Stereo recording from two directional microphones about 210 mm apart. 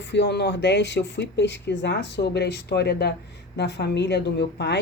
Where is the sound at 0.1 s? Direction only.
55° left (ahead or behind).